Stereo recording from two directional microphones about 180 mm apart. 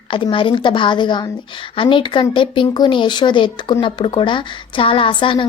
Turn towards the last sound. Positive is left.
turn(degrees=30)  # may be behind; listen again after turning